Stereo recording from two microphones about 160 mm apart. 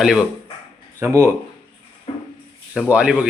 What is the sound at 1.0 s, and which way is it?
Speech, 15° right (ahead or behind).